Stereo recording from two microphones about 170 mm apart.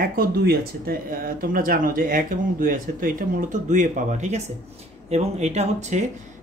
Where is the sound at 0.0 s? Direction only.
60° right (ahead or behind); by 6.0 s 45° right (ahead or behind).